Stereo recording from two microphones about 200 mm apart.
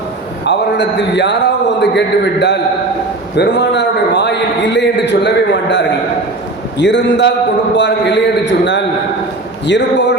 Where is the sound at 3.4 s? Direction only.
60° left (ahead or behind).